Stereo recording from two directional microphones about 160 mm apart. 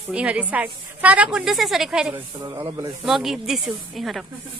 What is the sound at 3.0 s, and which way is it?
Speech, centre (ahead or behind).